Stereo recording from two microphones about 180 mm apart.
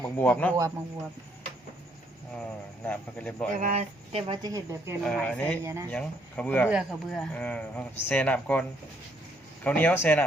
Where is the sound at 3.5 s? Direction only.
40° right (ahead or behind); by 5.0 s 15° right (ahead or behind).